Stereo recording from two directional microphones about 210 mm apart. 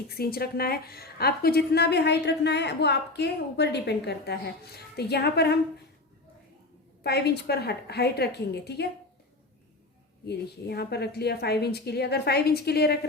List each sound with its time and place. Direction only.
0.1 s a woman's voice: 45° left (ahead or behind)
7.0 s a woman's voice: 50° left (ahead or behind)
10.2 s a woman's voice: 50° left (ahead or behind)